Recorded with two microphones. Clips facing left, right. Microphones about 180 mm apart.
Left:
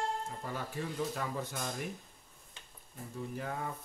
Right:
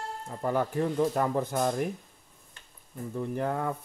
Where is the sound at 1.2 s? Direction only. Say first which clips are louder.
Right 11 dB; 55° right (ahead or behind).